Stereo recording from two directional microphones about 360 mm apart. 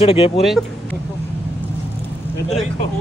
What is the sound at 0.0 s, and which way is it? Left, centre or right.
Speech, centre.